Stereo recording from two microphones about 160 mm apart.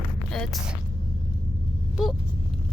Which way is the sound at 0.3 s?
Centre (ahead or behind).